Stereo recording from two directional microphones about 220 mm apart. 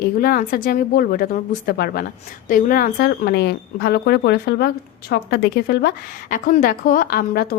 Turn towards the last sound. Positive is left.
turn(degrees=45)  # may be behind; listen again after turning